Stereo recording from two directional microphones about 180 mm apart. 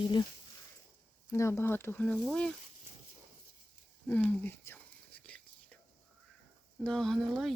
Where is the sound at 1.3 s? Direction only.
15° left (ahead or behind).